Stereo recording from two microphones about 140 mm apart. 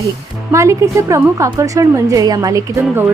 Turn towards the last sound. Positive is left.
turn(degrees=-15)  # may be behind; listen again after turning